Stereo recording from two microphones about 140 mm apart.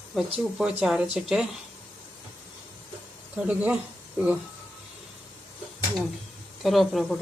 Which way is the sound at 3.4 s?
10° right (ahead or behind).